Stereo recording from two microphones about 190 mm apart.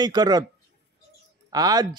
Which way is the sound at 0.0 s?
20° right (ahead or behind).